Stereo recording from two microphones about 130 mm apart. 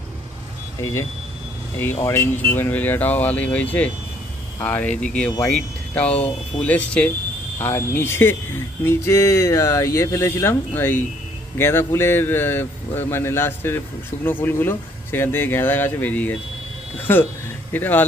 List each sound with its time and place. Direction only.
0.7 s speech: 25° left (ahead or behind)
17.7 s speech: 15° left (ahead or behind)